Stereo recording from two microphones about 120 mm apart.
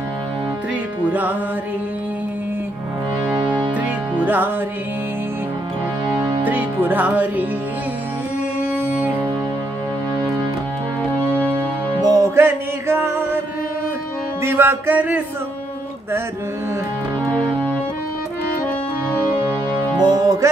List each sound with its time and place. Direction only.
3.7 s music: 15° right (ahead or behind)
6.4 s music: 15° right (ahead or behind)
8.8 s music: 10° right (ahead or behind)
11.2 s music: 10° left (ahead or behind)
12.0 s music: 30° right (ahead or behind)
12.4 s music: 15° right (ahead or behind)
14.4 s music: 20° right (ahead or behind)
17.3 s organ: 10° left (ahead or behind)
20.0 s music: 35° right (ahead or behind)